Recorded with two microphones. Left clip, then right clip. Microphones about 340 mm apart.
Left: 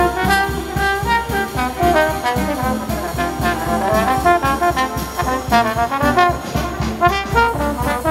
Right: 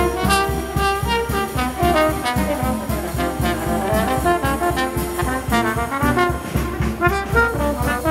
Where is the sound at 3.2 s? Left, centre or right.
Centre.